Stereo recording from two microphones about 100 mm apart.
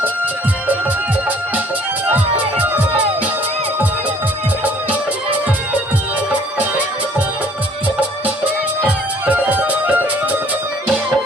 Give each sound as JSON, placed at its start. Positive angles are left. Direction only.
{"t": 9.2, "sound": "music", "side_deg": -15}